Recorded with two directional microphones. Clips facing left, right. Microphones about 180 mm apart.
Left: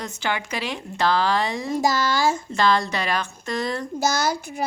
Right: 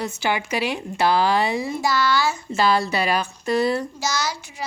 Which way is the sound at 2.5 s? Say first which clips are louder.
Right 1 dB; 5° right (ahead or behind).